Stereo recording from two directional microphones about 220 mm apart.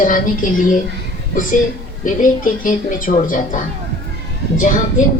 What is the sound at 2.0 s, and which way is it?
Speech, 35° left (ahead or behind).